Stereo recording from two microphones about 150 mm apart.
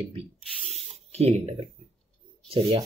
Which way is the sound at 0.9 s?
45° right (ahead or behind).